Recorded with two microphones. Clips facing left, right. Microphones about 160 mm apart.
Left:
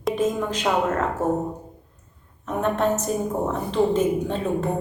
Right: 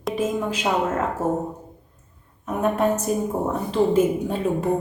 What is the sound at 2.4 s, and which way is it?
Speech, 10° right (ahead or behind).